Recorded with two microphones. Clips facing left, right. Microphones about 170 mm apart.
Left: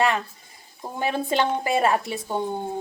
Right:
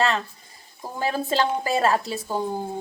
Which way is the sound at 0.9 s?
20° left (ahead or behind).